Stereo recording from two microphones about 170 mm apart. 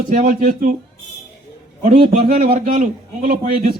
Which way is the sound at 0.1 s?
55° right (ahead or behind).